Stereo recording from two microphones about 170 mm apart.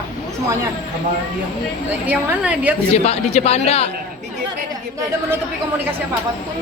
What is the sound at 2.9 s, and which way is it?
Speech, 40° left (ahead or behind).